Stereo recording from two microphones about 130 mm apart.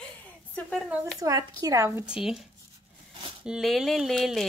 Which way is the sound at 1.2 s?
25° right (ahead or behind).